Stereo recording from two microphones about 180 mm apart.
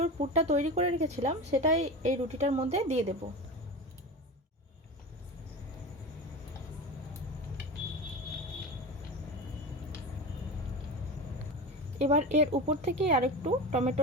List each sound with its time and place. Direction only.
0.0 s a woman's voice: 40° right (ahead or behind)
11.9 s a woman's voice: 40° right (ahead or behind)